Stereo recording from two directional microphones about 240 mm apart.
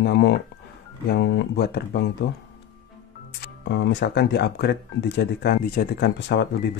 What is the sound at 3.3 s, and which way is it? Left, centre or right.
Speech, left.